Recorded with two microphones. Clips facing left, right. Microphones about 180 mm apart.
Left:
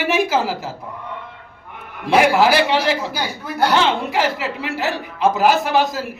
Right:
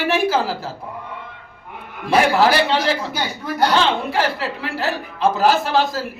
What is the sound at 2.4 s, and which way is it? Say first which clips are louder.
A woman's voice: left 1 dB; 15° left (ahead or behind).